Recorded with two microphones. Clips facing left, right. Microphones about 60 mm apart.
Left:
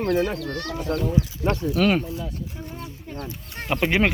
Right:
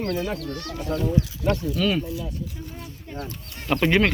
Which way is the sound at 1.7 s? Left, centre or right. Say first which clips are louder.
Left 3 dB; left.